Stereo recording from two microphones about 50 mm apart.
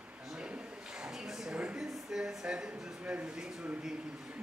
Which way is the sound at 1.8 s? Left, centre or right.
Centre.